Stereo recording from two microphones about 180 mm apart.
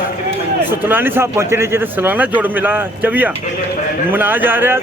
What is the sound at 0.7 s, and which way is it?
A man's voice, 10° right (ahead or behind).